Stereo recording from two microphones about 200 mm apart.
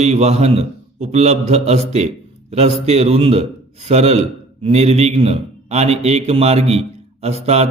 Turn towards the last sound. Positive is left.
turn(degrees=-30)  # may be behind; listen again after turning